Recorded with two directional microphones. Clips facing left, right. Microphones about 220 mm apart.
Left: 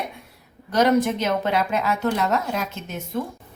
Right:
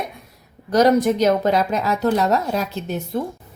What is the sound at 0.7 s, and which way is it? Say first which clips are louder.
Speech: right 4 dB; 40° right (ahead or behind).